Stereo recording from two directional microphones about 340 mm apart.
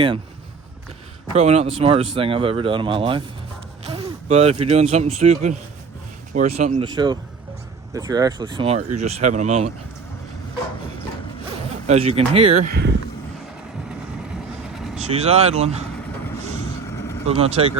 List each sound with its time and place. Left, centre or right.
1.3 s speech: centre
11.9 s speech: centre
14.9 s speech: centre
16.9 s vehicle: centre
17.2 s speech: centre